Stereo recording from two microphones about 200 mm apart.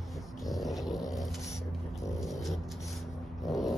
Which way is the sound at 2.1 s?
Centre (ahead or behind).